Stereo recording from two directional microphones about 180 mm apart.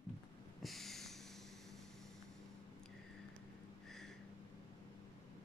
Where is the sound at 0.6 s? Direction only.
Centre (ahead or behind).